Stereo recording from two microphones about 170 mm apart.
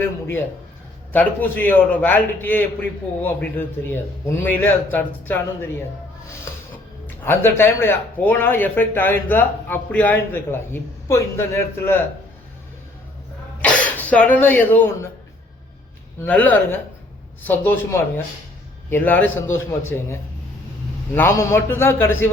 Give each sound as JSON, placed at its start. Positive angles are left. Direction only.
{"t": 1.1, "sound": "speech", "side_deg": 10}
{"t": 6.5, "sound": "a sound", "side_deg": 15}
{"t": 7.3, "sound": "speech", "side_deg": 15}
{"t": 13.6, "sound": "throat clearing", "side_deg": 10}
{"t": 16.2, "sound": "speech", "side_deg": 10}
{"t": 21.2, "sound": "speech", "side_deg": 15}